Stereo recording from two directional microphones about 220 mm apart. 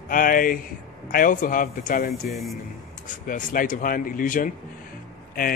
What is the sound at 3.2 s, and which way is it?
Speech, 40° left (ahead or behind).